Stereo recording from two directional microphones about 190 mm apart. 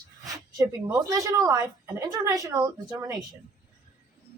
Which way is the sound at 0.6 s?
15° right (ahead or behind).